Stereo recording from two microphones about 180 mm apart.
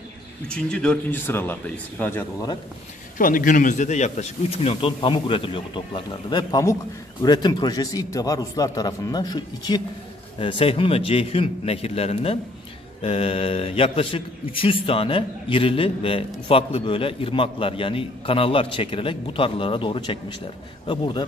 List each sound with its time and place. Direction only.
0.5 s speech: 5° left (ahead or behind)
3.2 s a man's voice: 50° left (ahead or behind); by 21.3 s 25° left (ahead or behind)